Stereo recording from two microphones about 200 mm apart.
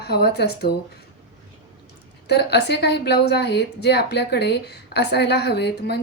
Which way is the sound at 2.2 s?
55° left (ahead or behind).